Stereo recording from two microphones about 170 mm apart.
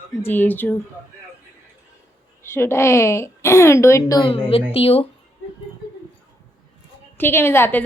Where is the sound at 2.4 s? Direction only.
15° left (ahead or behind).